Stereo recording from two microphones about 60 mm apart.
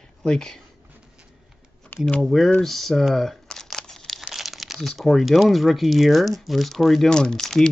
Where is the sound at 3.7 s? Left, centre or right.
Centre.